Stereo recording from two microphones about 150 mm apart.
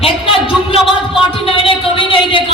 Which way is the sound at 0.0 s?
40° left (ahead or behind).